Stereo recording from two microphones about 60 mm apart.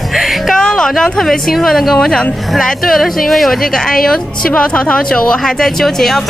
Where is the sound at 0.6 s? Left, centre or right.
Centre.